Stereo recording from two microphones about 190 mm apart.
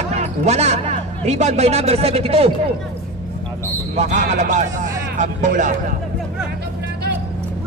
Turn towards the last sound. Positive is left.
turn(degrees=-40)  # may be behind; listen again after turning